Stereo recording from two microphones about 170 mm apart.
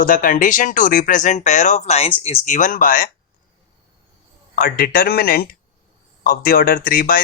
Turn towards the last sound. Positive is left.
turn(degrees=60)  # may be behind; listen again after turning